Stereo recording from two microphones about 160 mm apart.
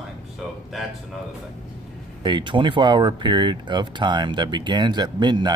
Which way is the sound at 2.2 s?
30° right (ahead or behind).